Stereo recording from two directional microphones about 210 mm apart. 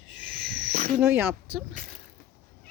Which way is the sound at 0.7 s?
45° right (ahead or behind).